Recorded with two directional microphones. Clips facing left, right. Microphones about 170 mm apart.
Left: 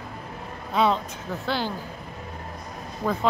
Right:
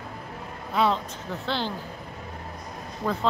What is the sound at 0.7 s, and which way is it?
Speech, 15° left (ahead or behind).